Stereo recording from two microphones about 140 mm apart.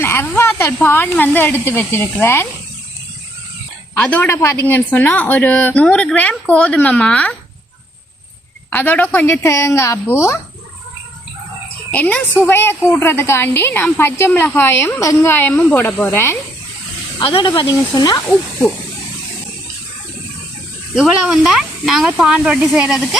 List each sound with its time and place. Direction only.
0.0 s a woman's voice: 15° left (ahead or behind)
3.9 s a woman's voice: 10° left (ahead or behind)
8.7 s a woman's voice: 10° left (ahead or behind)
11.9 s a woman's voice: 10° left (ahead or behind)
17.2 s speech: 35° left (ahead or behind)
20.9 s speech: 5° right (ahead or behind)